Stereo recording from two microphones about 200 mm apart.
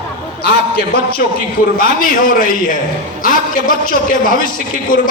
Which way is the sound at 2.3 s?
45° left (ahead or behind).